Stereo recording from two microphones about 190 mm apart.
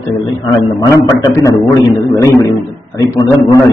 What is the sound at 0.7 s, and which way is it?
A man's voice, 15° left (ahead or behind).